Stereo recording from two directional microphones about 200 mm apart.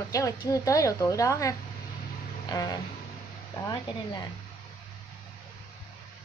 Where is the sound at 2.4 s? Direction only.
20° left (ahead or behind).